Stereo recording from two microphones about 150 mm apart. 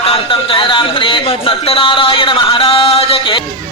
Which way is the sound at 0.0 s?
40° left (ahead or behind).